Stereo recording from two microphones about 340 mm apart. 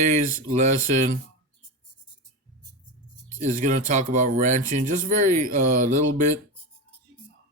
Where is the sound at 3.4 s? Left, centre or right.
Right.